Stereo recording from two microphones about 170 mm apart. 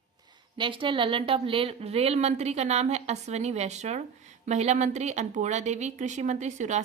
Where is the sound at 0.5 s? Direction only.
30° right (ahead or behind).